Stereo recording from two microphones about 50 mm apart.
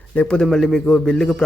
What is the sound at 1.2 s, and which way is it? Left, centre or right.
Speech, centre.